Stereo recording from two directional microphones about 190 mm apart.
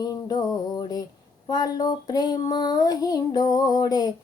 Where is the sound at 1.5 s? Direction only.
20° left (ahead or behind).